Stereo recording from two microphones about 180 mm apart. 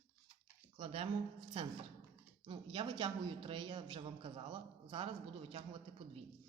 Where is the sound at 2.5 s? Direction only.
25° right (ahead or behind).